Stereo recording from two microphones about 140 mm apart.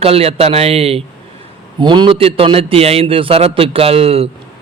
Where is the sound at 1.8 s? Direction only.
35° right (ahead or behind).